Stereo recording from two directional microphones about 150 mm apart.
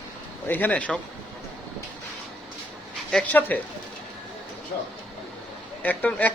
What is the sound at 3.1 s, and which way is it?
Speech, 5° left (ahead or behind).